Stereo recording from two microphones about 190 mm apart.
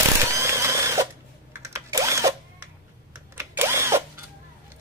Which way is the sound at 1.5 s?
15° right (ahead or behind).